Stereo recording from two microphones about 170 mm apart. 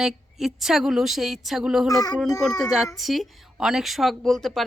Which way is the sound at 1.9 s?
20° left (ahead or behind).